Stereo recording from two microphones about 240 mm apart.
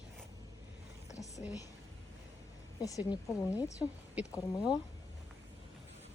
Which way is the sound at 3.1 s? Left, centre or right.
Centre.